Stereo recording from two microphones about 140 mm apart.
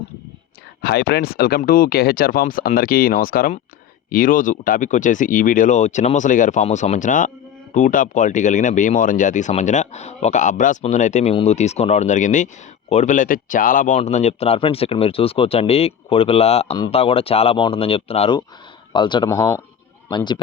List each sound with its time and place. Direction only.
1.2 s speech: 90° left; by 18.3 s 45° left (ahead or behind)
18.9 s speech: 35° left (ahead or behind)
19.3 s speech: 20° left (ahead or behind)
20.1 s speech: 30° left (ahead or behind)